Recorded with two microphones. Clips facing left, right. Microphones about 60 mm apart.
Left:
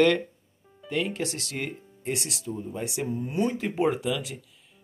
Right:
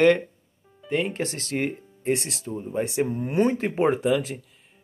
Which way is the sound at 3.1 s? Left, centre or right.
Right.